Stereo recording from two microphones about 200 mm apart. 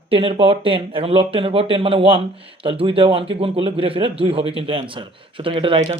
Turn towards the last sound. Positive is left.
turn(degrees=-25)  # may be behind; listen again after turning